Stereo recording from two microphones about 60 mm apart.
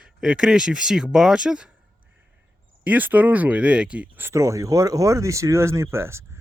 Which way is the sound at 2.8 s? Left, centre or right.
Right.